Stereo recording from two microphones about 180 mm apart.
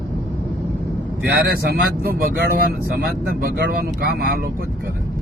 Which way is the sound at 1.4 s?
65° right (ahead or behind).